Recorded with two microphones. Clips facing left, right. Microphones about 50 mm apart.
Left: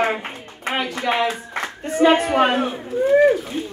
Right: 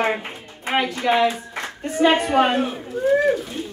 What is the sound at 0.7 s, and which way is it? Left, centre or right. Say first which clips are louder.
Speech: right 2 dB; centre.